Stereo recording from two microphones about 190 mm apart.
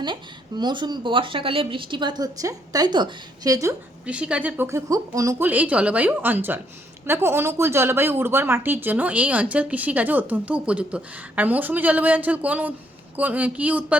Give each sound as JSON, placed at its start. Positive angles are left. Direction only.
{"t": 0.0, "sound": "speech", "side_deg": -25}